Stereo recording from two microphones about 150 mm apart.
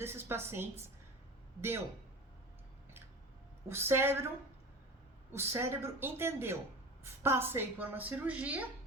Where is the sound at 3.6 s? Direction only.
15° right (ahead or behind).